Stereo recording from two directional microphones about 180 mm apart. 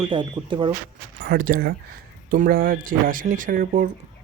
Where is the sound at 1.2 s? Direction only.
55° right (ahead or behind).